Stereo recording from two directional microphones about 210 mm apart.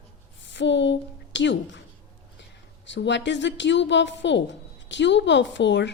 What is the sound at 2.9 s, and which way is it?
A woman's voice, 55° left (ahead or behind).